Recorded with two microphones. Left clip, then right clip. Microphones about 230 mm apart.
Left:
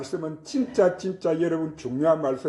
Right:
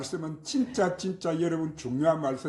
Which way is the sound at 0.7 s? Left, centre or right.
Right.